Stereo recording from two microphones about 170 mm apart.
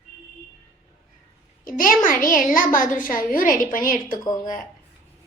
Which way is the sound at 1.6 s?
55° left (ahead or behind).